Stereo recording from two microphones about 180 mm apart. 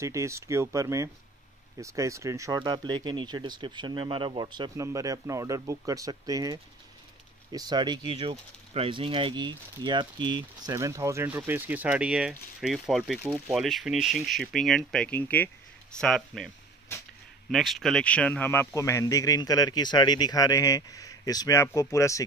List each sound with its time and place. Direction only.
0.0 s speech: 15° right (ahead or behind); by 16.4 s centre (ahead or behind)
17.5 s speech: centre (ahead or behind); by 22.2 s 15° left (ahead or behind)